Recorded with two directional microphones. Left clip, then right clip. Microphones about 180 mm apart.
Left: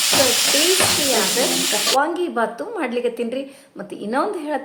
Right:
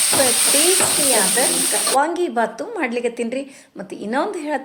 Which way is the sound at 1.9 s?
15° right (ahead or behind).